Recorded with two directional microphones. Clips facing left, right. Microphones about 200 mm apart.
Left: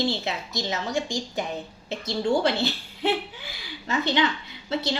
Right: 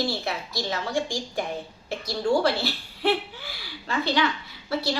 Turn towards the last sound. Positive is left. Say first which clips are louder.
# even
turn(degrees=20)  # may be behind; listen again after turning